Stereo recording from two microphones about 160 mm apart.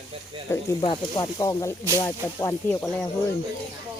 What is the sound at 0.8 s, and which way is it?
Speech, 30° left (ahead or behind).